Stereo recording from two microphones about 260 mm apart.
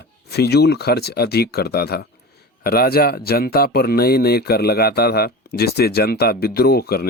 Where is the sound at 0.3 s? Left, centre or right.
Left.